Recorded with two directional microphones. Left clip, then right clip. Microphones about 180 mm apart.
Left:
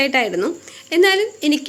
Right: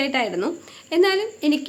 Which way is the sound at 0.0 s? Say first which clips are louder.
Left 5 dB; 5° left (ahead or behind).